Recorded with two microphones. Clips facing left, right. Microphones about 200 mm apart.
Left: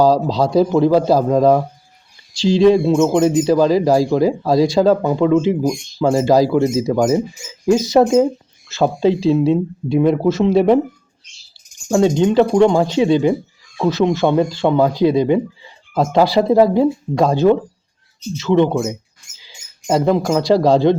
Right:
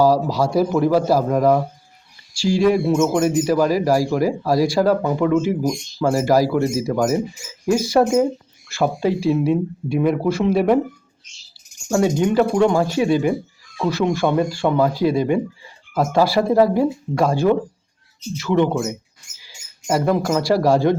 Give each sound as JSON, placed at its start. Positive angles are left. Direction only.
{"t": 0.0, "sound": "speech", "side_deg": 20}
{"t": 11.9, "sound": "speech", "side_deg": 20}